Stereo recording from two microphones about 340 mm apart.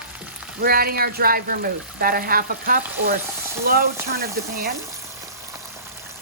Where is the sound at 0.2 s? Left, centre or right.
Centre.